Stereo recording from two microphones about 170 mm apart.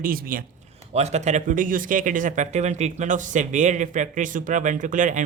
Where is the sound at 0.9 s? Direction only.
40° right (ahead or behind).